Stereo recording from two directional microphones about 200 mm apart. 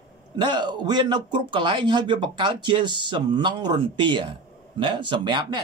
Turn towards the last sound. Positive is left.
turn(degrees=-20)  # may be behind; listen again after turning